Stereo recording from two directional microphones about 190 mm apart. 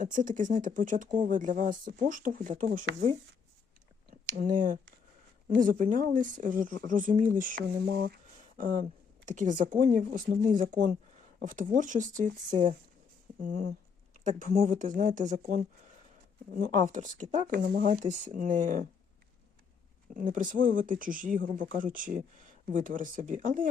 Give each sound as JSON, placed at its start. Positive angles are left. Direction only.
{"t": 0.0, "sound": "speech", "side_deg": -45}
{"t": 4.3, "sound": "speech", "side_deg": -45}
{"t": 5.8, "sound": "speech", "side_deg": -45}
{"t": 20.1, "sound": "speech", "side_deg": -45}